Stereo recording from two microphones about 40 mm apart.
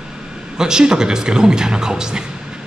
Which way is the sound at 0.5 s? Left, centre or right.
Centre.